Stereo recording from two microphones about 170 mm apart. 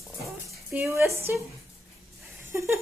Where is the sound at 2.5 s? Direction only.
15° right (ahead or behind).